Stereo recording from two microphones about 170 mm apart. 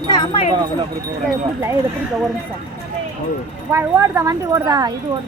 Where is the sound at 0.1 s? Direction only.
25° left (ahead or behind).